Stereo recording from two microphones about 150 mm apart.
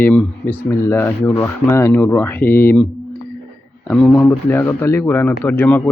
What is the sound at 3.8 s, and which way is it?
Speech, 10° left (ahead or behind).